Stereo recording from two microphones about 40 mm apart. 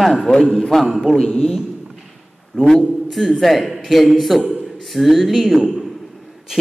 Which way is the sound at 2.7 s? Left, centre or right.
Centre.